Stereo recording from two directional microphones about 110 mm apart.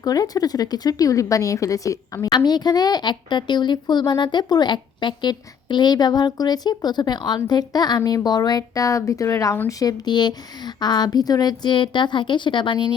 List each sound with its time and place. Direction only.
0.0 s speech: 35° left (ahead or behind)